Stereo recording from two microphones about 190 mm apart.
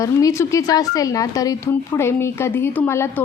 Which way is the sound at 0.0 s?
15° left (ahead or behind).